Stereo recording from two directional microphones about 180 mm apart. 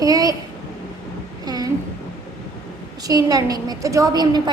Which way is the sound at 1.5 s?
20° right (ahead or behind).